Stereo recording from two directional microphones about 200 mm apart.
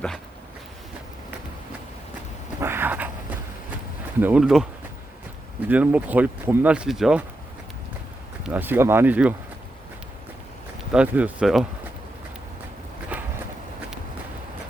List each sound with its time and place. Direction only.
2.6 s a sound: 10° right (ahead or behind)
4.2 s speech: 5° right (ahead or behind)
5.6 s speech: 5° right (ahead or behind)
8.4 s speech: 10° right (ahead or behind)
10.9 s speech: 5° right (ahead or behind)
13.1 s a sound: 5° right (ahead or behind)